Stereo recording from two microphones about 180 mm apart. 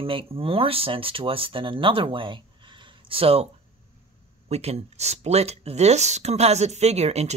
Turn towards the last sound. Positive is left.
turn(degrees=-35)  # may be behind; listen again after turning